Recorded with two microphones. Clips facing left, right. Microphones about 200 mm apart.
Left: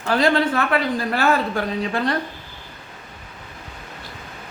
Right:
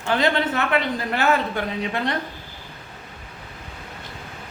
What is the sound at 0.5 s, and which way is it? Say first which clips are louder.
Speech: left 2 dB; 20° right (ahead or behind).